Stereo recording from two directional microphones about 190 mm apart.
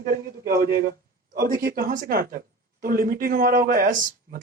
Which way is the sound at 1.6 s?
50° right (ahead or behind).